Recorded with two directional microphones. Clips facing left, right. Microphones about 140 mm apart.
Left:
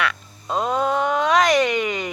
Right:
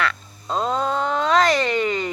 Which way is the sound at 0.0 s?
10° left (ahead or behind).